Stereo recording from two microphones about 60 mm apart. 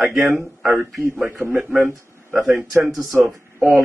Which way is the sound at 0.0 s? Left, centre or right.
Centre.